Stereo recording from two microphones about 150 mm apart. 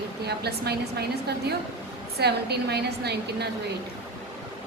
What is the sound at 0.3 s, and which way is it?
Speech, 90° right.